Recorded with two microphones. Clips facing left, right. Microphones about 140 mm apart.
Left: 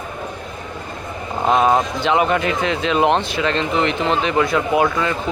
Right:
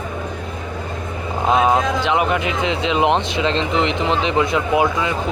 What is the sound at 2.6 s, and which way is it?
Speech, 20° right (ahead or behind).